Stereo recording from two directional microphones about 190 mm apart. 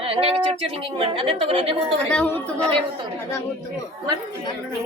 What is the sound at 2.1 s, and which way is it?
Speech, 10° left (ahead or behind).